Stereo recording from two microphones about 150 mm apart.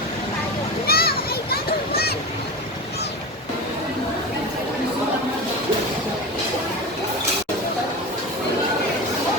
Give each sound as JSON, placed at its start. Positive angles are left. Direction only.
{"t": 0.9, "sound": "children playing", "side_deg": 90}